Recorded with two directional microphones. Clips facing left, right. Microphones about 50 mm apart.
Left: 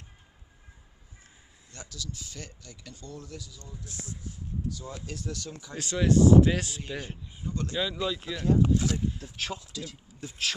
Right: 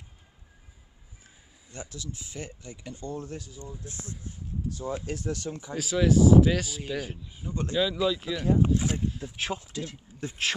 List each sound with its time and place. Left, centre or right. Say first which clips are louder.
1.7 s speech: right 2 dB; right
5.8 s speech: right 1 dB; centre
8.5 s speech: even; right
9.6 s speech: right 4 dB; right